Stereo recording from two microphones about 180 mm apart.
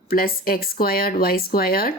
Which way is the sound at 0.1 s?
55° left (ahead or behind).